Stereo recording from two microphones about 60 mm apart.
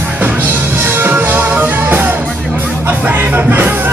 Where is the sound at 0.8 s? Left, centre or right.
Right.